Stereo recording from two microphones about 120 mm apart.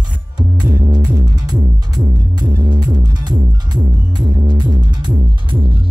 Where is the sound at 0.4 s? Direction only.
35° right (ahead or behind).